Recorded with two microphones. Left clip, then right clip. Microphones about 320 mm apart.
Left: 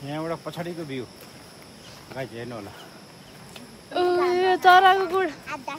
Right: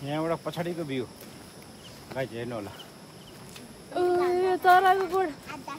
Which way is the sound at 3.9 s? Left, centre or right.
Left.